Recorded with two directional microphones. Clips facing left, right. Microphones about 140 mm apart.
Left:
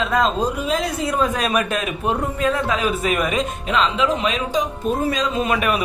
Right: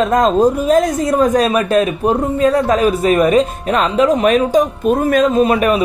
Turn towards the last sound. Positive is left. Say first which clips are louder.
# right 8 dB
turn(degrees=-35)  # may be behind; listen again after turning